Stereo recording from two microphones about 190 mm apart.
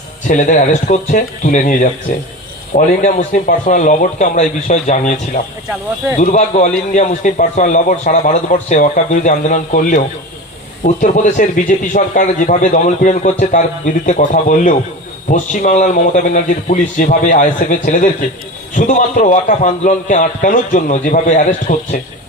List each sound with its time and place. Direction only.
0.3 s speech: 40° left (ahead or behind)